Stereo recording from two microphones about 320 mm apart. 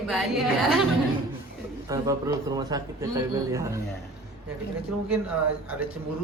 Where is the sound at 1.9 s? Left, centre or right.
Centre.